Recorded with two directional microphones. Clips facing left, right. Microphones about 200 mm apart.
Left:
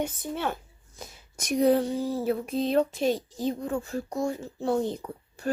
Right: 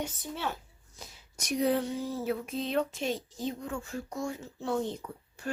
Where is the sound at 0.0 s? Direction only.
55° left (ahead or behind).